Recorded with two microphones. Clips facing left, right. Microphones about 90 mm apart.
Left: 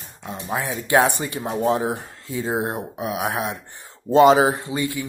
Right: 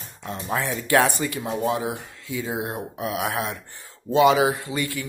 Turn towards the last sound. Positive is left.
turn(degrees=20)  # may be behind; listen again after turning